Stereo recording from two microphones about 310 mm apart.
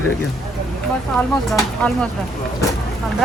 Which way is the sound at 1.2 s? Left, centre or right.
Centre.